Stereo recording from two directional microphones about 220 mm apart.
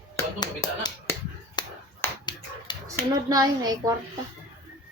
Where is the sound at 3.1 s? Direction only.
15° right (ahead or behind).